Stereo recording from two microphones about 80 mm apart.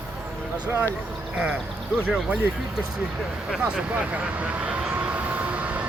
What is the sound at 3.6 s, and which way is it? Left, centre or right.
Vehicle, centre.